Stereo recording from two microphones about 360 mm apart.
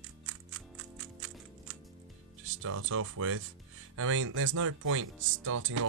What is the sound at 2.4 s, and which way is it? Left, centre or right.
Speech, right.